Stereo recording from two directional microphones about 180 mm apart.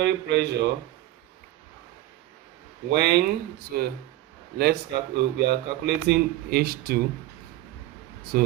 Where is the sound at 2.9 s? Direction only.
65° right (ahead or behind).